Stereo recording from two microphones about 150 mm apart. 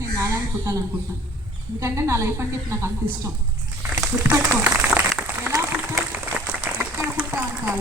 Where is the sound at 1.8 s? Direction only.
20° right (ahead or behind).